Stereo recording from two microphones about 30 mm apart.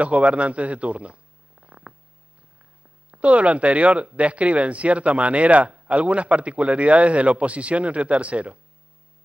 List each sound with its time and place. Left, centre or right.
0.0 s speech: right